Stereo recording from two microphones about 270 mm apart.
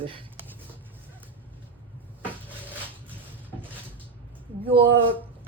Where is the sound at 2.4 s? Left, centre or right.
Centre.